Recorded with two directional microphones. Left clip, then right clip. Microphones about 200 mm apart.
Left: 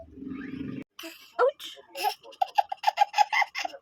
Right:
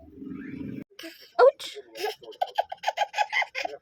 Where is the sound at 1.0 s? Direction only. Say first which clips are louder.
Even; 15° left (ahead or behind).